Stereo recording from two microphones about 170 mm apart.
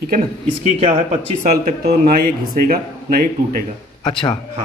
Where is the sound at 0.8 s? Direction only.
40° right (ahead or behind).